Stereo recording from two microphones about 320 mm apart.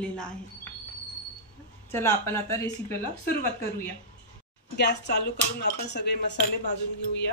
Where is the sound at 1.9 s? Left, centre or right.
Centre.